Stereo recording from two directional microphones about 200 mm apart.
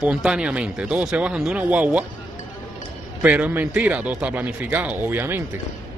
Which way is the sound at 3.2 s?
5° right (ahead or behind).